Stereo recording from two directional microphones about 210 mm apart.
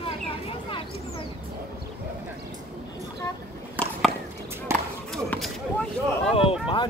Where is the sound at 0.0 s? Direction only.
25° left (ahead or behind).